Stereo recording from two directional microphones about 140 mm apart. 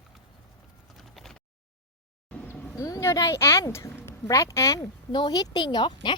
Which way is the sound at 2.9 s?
25° left (ahead or behind).